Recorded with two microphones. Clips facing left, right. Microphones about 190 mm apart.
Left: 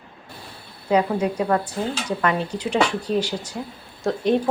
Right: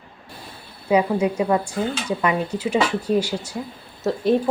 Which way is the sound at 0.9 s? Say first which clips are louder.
Right 1 dB; 10° right (ahead or behind).